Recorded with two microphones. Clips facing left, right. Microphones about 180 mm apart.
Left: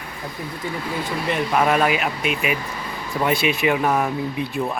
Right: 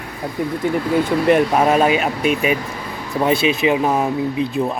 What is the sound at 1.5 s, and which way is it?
Speech, 30° right (ahead or behind).